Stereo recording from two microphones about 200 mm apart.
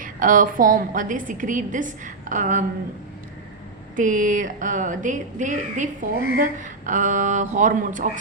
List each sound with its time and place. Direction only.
0.0 s a woman's voice: 40° right (ahead or behind)
3.9 s a woman's voice: 40° right (ahead or behind)